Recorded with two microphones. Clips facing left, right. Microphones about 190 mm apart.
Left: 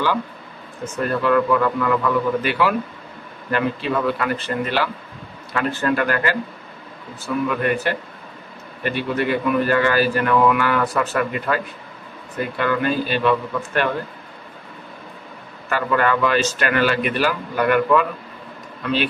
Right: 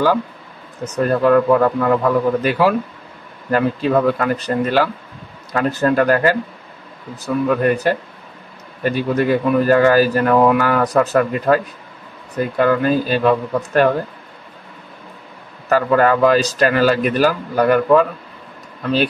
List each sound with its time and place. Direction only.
0.9 s speech: 40° right (ahead or behind)
7.4 s speech: 40° right (ahead or behind)
15.7 s speech: 40° right (ahead or behind)